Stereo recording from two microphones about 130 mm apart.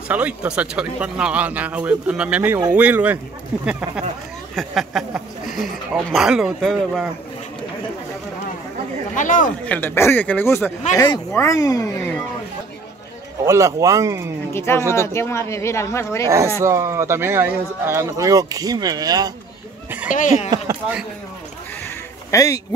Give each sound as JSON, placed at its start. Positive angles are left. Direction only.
{"t": 0.1, "sound": "speech", "side_deg": -10}
{"t": 4.6, "sound": "speech", "side_deg": 0}
{"t": 9.1, "sound": "speech", "side_deg": 80}
{"t": 9.7, "sound": "speech", "side_deg": 15}
{"t": 13.5, "sound": "speech", "side_deg": -25}
{"t": 14.5, "sound": "speech", "side_deg": 20}
{"t": 16.3, "sound": "speech", "side_deg": -20}
{"t": 20.1, "sound": "speech", "side_deg": 80}
{"t": 20.4, "sound": "speech", "side_deg": -30}
{"t": 22.3, "sound": "speech", "side_deg": 25}